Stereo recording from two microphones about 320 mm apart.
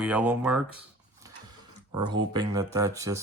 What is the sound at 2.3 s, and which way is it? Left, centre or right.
Speech, centre.